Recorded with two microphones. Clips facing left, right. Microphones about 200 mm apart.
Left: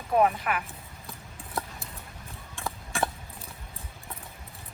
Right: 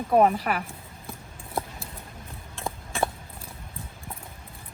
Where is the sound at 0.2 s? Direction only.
35° right (ahead or behind).